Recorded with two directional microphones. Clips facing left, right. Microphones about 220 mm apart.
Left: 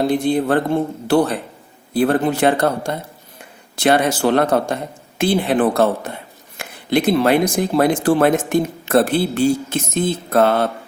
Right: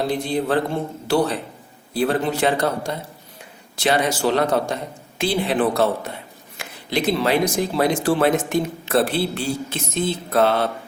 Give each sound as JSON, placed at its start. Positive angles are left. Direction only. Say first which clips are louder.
{"t": 0.1, "sound": "speech", "louder": "left 5 dB", "side_deg": 50}